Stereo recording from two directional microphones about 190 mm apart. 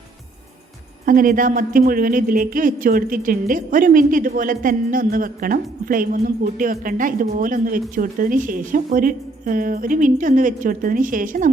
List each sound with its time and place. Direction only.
1.0 s a woman's voice: 45° right (ahead or behind)